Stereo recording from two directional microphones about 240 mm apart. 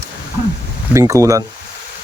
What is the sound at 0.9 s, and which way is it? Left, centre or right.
Speech, centre.